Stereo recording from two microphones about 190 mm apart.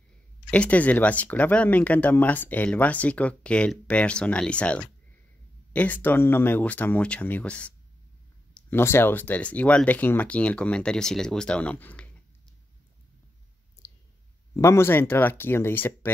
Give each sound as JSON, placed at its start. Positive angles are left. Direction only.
{"t": 0.5, "sound": "speech", "side_deg": 5}
{"t": 13.8, "sound": "clicking", "side_deg": 15}
{"t": 14.5, "sound": "speech", "side_deg": 15}